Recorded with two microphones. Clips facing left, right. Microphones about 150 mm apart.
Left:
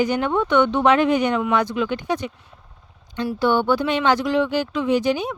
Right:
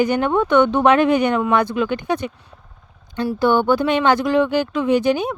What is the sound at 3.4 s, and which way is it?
Speech, 45° right (ahead or behind).